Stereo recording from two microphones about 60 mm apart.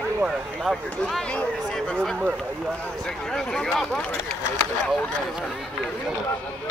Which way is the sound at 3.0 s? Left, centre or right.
Centre.